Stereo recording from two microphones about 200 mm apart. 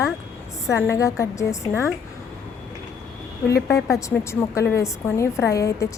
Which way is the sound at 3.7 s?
15° left (ahead or behind).